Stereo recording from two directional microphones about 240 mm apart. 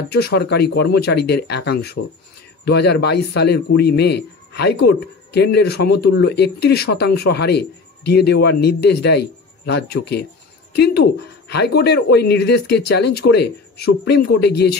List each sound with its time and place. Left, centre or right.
0.1 s a man's voice: left